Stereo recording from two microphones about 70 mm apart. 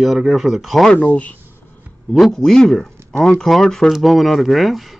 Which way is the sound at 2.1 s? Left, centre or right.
Centre.